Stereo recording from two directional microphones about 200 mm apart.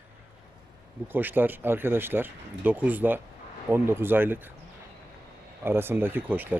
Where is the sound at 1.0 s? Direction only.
10° right (ahead or behind).